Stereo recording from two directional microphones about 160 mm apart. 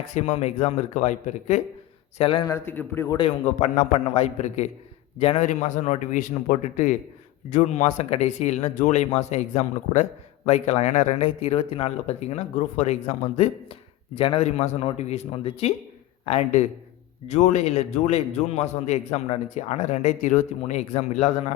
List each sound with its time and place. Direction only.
0.1 s a man's voice: 45° left (ahead or behind)
2.1 s speech: 35° left (ahead or behind)
2.5 s a man's voice: 15° left (ahead or behind)
3.1 s a man's voice: 35° left (ahead or behind)